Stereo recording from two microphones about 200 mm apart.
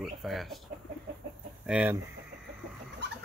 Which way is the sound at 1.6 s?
10° right (ahead or behind).